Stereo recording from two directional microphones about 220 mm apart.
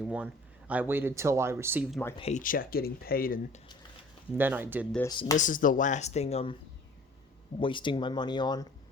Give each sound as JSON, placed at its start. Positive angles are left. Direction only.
{"t": 0.0, "sound": "speech", "side_deg": -5}
{"t": 2.1, "sound": "speech", "side_deg": 30}
{"t": 4.4, "sound": "speech", "side_deg": -10}
{"t": 5.0, "sound": "speech", "side_deg": 20}
{"t": 5.4, "sound": "speech", "side_deg": 35}
{"t": 7.6, "sound": "speech", "side_deg": 20}